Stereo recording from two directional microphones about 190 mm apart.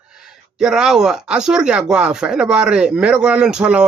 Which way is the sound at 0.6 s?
5° right (ahead or behind).